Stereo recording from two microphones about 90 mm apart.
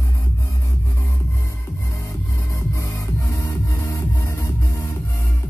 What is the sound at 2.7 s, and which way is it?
Music, 35° left (ahead or behind).